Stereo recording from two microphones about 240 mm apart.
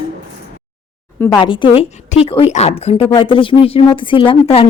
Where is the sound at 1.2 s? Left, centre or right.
Centre.